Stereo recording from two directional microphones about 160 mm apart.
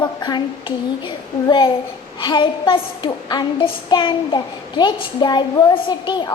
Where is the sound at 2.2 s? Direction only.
30° left (ahead or behind).